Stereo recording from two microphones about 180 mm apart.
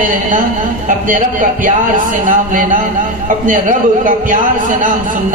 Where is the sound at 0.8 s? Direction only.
45° right (ahead or behind).